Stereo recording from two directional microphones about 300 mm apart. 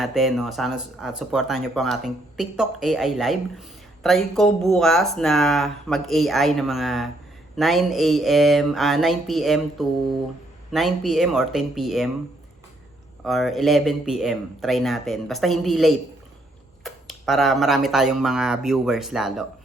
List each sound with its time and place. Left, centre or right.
0.0 s speech: centre
13.2 s speech: centre